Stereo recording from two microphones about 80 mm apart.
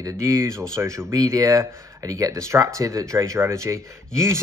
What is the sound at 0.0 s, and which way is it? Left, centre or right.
Speech, right.